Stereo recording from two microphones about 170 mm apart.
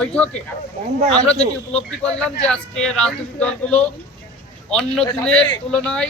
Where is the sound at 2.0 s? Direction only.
5° left (ahead or behind).